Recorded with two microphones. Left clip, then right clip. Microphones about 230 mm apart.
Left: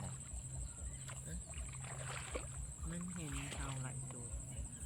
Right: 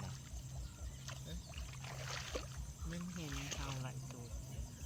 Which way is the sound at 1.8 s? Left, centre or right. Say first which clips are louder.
Right 2 dB; centre.